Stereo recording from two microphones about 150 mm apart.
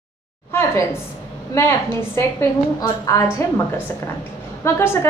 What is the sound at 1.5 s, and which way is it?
A woman's voice, 15° left (ahead or behind).